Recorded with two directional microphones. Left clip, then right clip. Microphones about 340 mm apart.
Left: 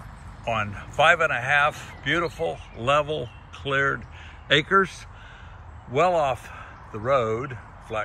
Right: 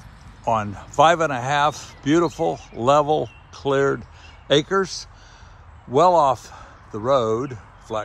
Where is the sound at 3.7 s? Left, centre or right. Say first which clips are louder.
Right 4 dB; centre.